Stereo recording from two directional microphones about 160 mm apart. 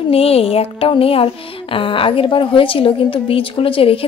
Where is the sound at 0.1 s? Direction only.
40° left (ahead or behind).